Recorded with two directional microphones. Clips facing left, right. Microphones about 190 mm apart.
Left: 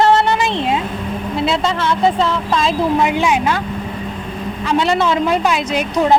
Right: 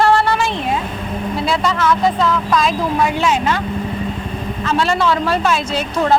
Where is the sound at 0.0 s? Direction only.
20° left (ahead or behind).